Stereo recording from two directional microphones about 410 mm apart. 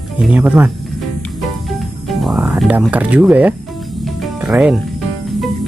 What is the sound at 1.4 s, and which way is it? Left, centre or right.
Music, centre.